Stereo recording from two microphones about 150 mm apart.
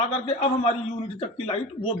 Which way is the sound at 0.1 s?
45° left (ahead or behind).